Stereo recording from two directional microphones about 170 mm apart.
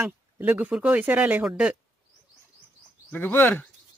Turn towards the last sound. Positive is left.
turn(degrees=10)  # may be behind; listen again after turning